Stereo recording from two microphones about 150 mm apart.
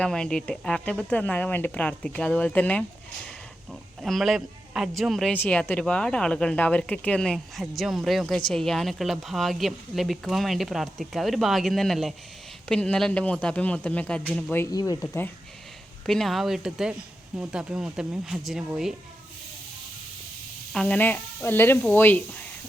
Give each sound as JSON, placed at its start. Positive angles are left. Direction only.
{"t": 0.0, "sound": "speech", "side_deg": 5}
{"t": 14.6, "sound": "speech", "side_deg": 25}
{"t": 15.0, "sound": "speech", "side_deg": 15}
{"t": 16.0, "sound": "speech", "side_deg": 0}
{"t": 20.7, "sound": "speech", "side_deg": 10}